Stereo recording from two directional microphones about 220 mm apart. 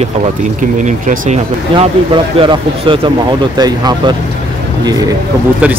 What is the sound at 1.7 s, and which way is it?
Speech, 20° right (ahead or behind).